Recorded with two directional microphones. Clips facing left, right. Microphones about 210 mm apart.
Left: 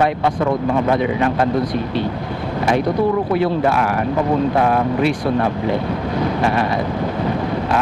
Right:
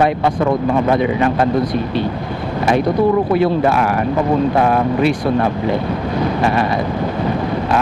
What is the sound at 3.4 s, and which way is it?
A man's voice, 15° right (ahead or behind).